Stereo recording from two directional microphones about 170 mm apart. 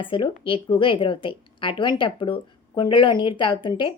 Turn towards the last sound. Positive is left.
turn(degrees=30)  # may be behind; listen again after turning